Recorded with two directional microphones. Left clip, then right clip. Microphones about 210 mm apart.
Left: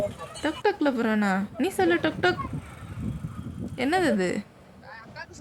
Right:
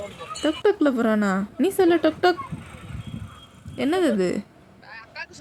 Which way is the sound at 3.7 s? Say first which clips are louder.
Right 2 dB; centre (ahead or behind).